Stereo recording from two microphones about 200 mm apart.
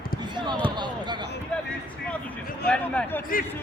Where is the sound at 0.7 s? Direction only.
20° right (ahead or behind).